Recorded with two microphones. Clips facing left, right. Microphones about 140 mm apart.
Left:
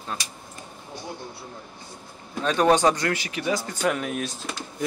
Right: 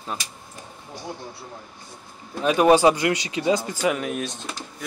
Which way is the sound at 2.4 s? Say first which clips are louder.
Right 3 dB; 10° right (ahead or behind).